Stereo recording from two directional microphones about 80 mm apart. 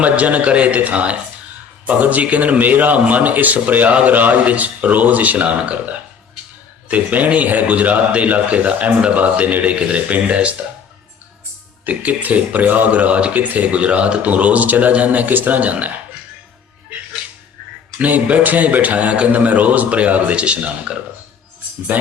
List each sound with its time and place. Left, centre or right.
0.0 s a man's voice: centre
11.9 s a man's voice: centre
18.0 s a man's voice: right